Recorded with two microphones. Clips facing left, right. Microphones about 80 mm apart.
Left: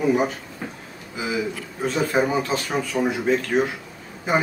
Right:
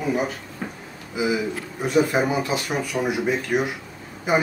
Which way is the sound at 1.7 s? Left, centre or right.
Centre.